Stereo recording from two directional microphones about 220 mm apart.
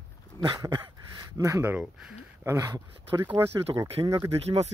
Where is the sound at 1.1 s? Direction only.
15° right (ahead or behind).